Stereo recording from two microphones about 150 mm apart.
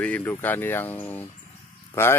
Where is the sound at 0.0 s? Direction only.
10° left (ahead or behind).